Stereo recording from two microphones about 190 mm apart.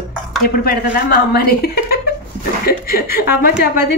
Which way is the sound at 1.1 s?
55° left (ahead or behind).